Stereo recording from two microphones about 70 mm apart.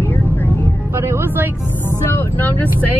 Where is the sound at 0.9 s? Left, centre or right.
Right.